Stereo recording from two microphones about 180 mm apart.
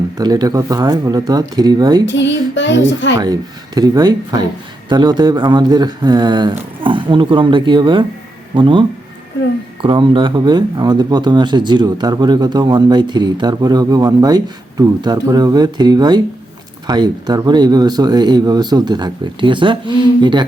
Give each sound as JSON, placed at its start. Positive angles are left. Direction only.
{"t": 0.2, "sound": "speech", "side_deg": -20}
{"t": 2.0, "sound": "speech", "side_deg": 90}
{"t": 3.8, "sound": "speech", "side_deg": -20}
{"t": 9.8, "sound": "speech", "side_deg": -30}